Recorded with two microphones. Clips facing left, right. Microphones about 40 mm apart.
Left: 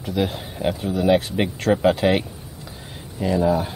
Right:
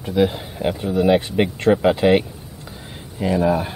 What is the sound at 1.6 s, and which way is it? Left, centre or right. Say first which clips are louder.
Speech: right 1 dB; centre.